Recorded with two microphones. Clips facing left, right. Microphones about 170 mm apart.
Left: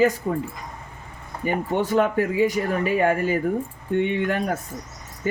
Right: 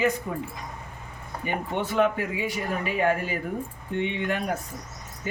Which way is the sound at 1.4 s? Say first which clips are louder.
Left 6 dB; 40° left (ahead or behind).